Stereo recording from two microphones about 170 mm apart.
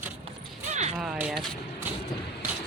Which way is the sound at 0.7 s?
40° right (ahead or behind).